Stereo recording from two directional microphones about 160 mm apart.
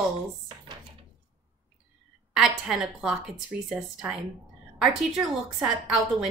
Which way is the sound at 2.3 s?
5° right (ahead or behind).